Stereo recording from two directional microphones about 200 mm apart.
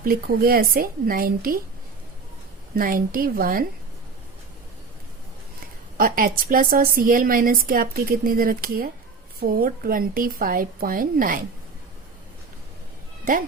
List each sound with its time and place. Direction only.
0.0 s a woman's voice: 45° right (ahead or behind)
2.7 s a woman's voice: 45° right (ahead or behind)
6.0 s a woman's voice: 45° right (ahead or behind)